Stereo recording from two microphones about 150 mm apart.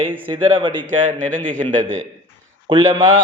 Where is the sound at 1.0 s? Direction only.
60° right (ahead or behind).